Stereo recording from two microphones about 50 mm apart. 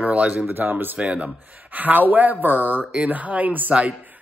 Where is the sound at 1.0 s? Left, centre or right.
Right.